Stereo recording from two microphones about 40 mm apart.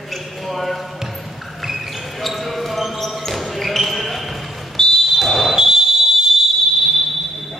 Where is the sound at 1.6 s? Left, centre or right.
Centre.